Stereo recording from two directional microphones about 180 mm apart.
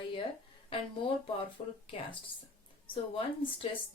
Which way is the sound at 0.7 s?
30° left (ahead or behind).